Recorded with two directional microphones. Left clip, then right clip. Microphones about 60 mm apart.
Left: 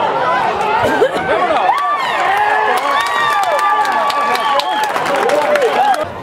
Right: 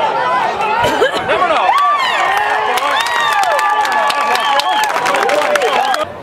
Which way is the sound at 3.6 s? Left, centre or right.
Centre.